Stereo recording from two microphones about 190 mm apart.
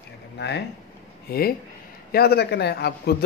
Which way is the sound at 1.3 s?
55° left (ahead or behind).